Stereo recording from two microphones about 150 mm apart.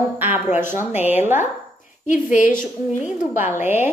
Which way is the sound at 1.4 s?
55° left (ahead or behind).